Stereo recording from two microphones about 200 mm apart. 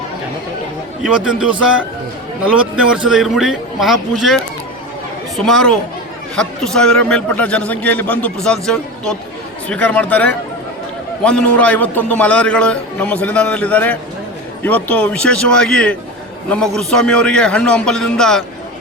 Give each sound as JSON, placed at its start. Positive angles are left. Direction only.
{"t": 1.0, "sound": "a man's voice", "side_deg": -5}